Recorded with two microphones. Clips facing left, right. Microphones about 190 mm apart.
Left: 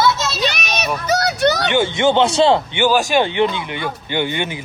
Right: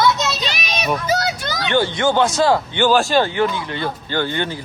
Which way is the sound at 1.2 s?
70° left (ahead or behind).